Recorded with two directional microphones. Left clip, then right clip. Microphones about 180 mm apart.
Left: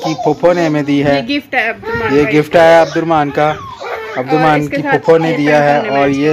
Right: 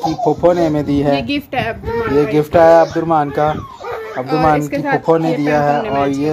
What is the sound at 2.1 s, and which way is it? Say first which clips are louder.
Speech: left 4 dB; 5° right (ahead or behind).